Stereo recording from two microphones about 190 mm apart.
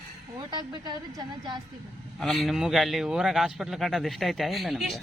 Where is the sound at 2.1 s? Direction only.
Centre (ahead or behind).